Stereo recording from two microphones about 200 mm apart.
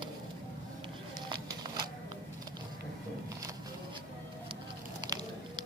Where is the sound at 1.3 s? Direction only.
20° right (ahead or behind).